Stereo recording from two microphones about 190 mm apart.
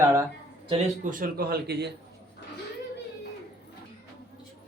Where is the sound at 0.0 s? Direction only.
15° right (ahead or behind).